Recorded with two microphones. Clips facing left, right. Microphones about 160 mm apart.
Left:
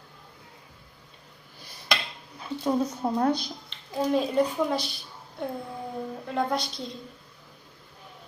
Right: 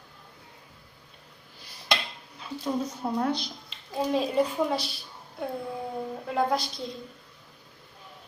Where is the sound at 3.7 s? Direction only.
Centre (ahead or behind).